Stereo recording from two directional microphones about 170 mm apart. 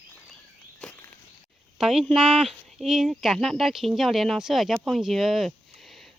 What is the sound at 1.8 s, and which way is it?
Speech, 5° right (ahead or behind).